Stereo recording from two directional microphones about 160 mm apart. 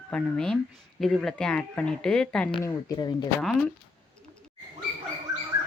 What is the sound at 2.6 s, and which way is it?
Speech, 25° left (ahead or behind).